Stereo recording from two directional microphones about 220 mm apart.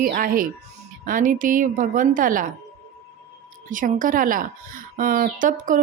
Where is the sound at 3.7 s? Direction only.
35° right (ahead or behind).